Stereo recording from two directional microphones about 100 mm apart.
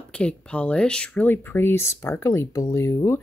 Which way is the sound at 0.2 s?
10° left (ahead or behind).